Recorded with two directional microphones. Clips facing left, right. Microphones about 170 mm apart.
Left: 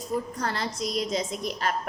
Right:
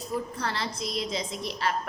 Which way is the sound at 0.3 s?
45° left (ahead or behind).